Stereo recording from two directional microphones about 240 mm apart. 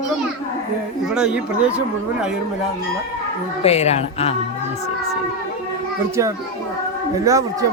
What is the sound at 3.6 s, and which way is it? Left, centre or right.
Speech, left.